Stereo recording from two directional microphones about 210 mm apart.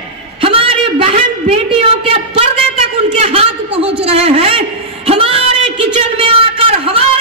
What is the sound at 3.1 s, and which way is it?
A man's voice, 25° right (ahead or behind).